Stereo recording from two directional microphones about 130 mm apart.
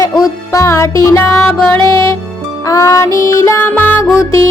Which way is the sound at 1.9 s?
25° left (ahead or behind).